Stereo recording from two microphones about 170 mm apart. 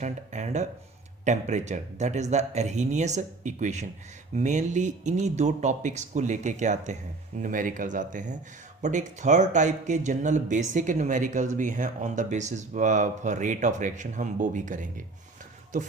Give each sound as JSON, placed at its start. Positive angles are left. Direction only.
{"t": 0.0, "sound": "speech", "side_deg": -45}